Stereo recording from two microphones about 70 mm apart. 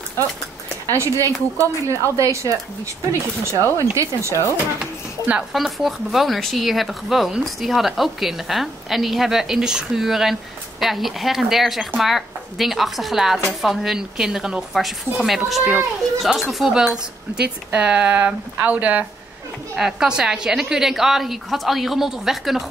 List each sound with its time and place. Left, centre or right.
0.9 s a woman's voice: right
5.5 s speech: centre
19.7 s speech: centre